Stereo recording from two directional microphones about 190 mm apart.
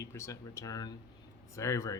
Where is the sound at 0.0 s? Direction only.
15° left (ahead or behind).